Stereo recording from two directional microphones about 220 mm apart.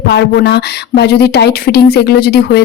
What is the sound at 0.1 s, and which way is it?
Speech, 50° left (ahead or behind).